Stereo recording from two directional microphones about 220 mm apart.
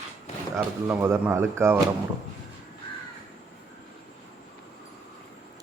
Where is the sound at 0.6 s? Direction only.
10° right (ahead or behind).